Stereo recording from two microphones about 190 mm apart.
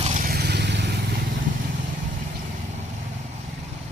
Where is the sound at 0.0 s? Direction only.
45° right (ahead or behind); by 0.9 s 65° right (ahead or behind).